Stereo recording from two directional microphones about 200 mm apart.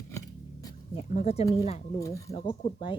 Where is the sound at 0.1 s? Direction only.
15° left (ahead or behind).